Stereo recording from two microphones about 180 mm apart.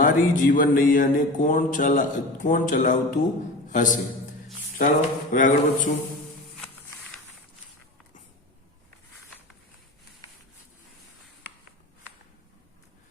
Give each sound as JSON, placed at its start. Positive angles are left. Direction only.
{"t": 0.0, "sound": "a man's voice", "side_deg": 50}